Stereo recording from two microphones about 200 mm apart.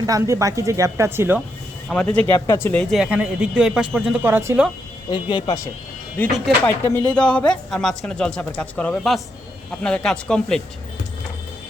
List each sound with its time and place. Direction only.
0.0 s speech: 15° right (ahead or behind)
1.9 s speech: 5° left (ahead or behind)
2.9 s speech: 5° right (ahead or behind)
5.1 s speech: 20° left (ahead or behind); by 10.6 s 5° left (ahead or behind)